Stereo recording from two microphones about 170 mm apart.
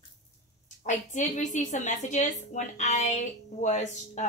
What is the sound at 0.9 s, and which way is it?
A woman's voice, 45° left (ahead or behind).